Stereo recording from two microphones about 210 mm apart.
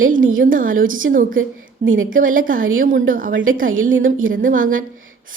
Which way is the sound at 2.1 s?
40° right (ahead or behind).